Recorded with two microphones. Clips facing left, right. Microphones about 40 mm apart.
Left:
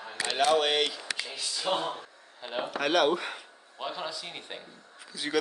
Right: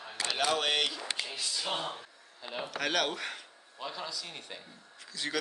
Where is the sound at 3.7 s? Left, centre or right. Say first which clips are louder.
Left 4 dB; left.